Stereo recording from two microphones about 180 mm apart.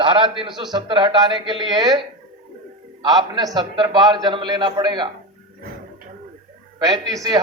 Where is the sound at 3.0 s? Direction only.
20° right (ahead or behind).